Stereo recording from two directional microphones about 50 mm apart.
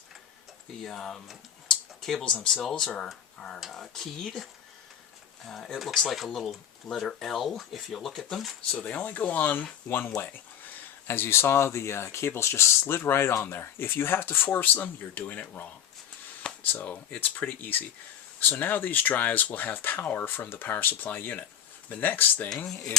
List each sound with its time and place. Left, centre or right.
0.9 s speech: centre
1.7 s a sound: centre
2.2 s speech: centre
5.5 s speech: centre
8.7 s speech: left
10.2 s a sound: left
11.1 s speech: left
14.7 s speech: left
16.4 s a sound: centre
17.2 s speech: left